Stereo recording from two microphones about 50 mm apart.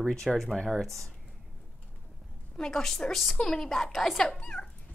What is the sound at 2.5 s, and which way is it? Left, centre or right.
A woman's voice, centre.